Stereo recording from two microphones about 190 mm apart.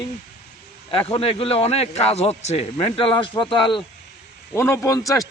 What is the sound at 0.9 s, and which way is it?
Speech, 30° left (ahead or behind).